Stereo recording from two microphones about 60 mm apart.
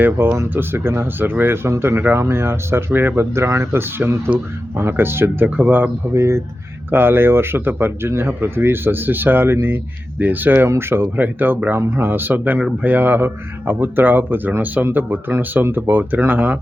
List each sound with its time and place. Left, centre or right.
0.0 s speech: right
3.3 s speech: right
5.5 s speech: right
6.1 s speech: right
6.9 s speech: right